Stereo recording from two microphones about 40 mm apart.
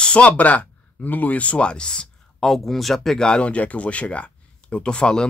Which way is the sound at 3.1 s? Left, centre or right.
Centre.